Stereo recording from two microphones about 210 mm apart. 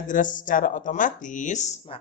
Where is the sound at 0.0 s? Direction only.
40° left (ahead or behind).